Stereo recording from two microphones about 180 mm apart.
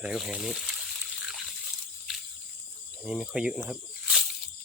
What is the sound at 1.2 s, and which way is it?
Water, 5° right (ahead or behind).